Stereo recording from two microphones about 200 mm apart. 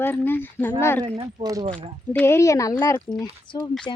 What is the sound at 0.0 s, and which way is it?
Speech, 10° left (ahead or behind).